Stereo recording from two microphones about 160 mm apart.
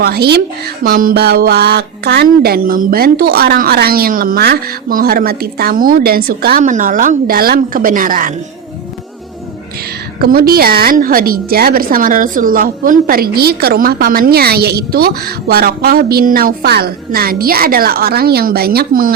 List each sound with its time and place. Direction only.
0.0 s speech: 80° right
0.9 s a woman's voice: 65° right (ahead or behind)
10.2 s a woman's voice: 70° right (ahead or behind)